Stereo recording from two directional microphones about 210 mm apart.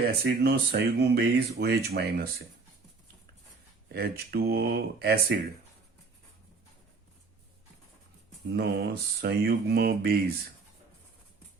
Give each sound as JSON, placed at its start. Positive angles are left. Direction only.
{"t": 0.3, "sound": "speech", "side_deg": -45}
{"t": 3.8, "sound": "speech", "side_deg": -45}
{"t": 8.5, "sound": "speech", "side_deg": -50}